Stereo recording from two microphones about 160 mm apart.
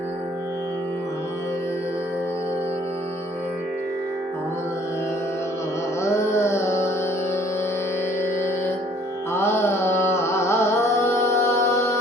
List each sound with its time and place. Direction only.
6.0 s music: 15° left (ahead or behind)
8.2 s music: 15° left (ahead or behind)
9.3 s carnatic music: 15° left (ahead or behind)